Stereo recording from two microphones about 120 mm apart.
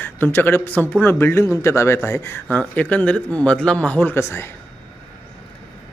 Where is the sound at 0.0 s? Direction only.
15° left (ahead or behind).